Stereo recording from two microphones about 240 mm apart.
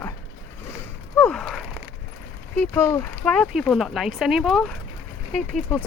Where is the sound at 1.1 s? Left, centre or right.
Centre.